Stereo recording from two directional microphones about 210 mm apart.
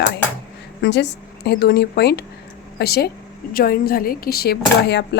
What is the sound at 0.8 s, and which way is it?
A woman's voice, 55° left (ahead or behind).